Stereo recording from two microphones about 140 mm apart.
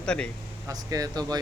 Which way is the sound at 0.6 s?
25° right (ahead or behind).